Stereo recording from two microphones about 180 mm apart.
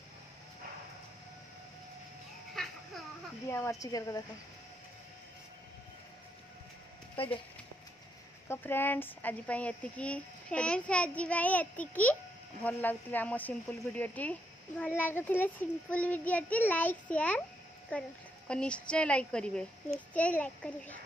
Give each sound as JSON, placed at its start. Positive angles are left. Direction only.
{"t": 2.6, "sound": "a sound", "side_deg": 0}
{"t": 3.4, "sound": "speech", "side_deg": 15}
{"t": 8.5, "sound": "a woman's voice", "side_deg": 10}